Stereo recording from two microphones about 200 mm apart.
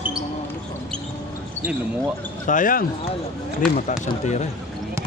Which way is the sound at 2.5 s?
40° left (ahead or behind).